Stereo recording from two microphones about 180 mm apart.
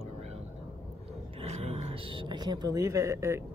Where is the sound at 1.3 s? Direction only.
35° right (ahead or behind); by 3.4 s 15° right (ahead or behind).